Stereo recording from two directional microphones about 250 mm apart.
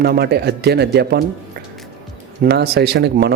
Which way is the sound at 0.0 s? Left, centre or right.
Right.